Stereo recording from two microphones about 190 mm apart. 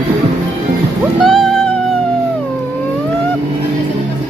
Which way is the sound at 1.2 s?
Centre (ahead or behind).